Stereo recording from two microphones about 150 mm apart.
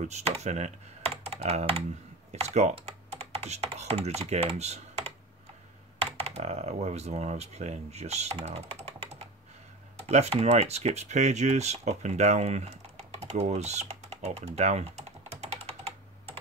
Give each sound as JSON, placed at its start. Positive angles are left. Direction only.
{"t": 0.1, "sound": "speech", "side_deg": -45}